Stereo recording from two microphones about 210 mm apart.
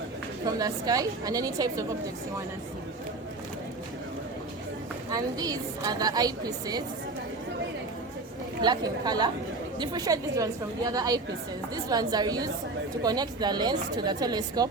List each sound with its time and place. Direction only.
0.4 s a woman's voice: 15° right (ahead or behind)
5.1 s a woman's voice: 20° right (ahead or behind)
8.6 s a woman's voice: 20° right (ahead or behind)